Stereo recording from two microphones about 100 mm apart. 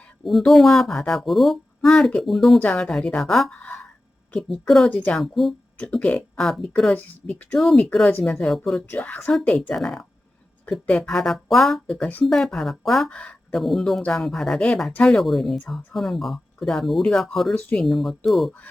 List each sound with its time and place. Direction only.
0.3 s speech: centre (ahead or behind)
2.6 s a woman's voice: 10° left (ahead or behind)
3.6 s a sound: 20° left (ahead or behind)
4.6 s speech: centre (ahead or behind)
4.9 s a woman's voice: 15° left (ahead or behind)
5.2 s speech: centre (ahead or behind)
5.7 s a woman's voice: 10° left (ahead or behind)
7.6 s speech: centre (ahead or behind)
8.9 s a woman's voice: 15° left (ahead or behind)
9.5 s speech: 5° left (ahead or behind)
17.5 s a woman's voice: 15° left (ahead or behind)
17.8 s speech: centre (ahead or behind)